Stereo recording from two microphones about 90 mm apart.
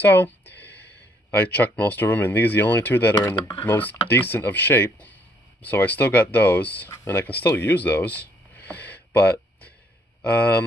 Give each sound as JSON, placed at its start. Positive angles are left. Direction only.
{"t": 0.0, "sound": "speech", "side_deg": 20}